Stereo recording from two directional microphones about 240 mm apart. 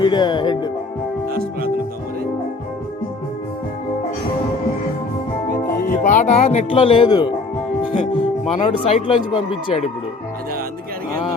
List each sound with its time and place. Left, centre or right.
0.0 s speech: centre
1.3 s speech: right
5.8 s speech: left